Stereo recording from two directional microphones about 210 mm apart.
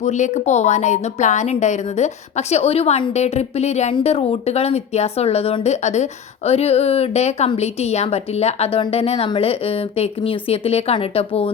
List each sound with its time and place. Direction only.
0.0 s a woman's voice: 35° left (ahead or behind)